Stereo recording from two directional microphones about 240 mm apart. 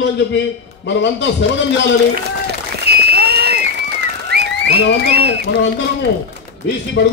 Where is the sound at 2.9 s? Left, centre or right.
Right.